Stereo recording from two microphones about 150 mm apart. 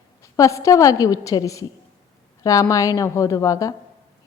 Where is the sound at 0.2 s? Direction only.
20° left (ahead or behind).